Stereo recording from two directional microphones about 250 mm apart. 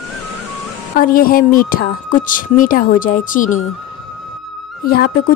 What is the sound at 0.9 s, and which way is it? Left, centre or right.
Speech, left.